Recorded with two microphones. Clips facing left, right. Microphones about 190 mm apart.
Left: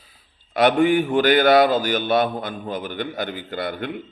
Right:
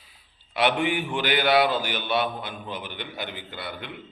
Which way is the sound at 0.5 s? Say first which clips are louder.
Left 7 dB; 45° left (ahead or behind).